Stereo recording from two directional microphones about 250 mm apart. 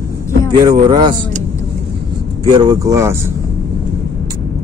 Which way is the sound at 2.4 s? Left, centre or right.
Centre.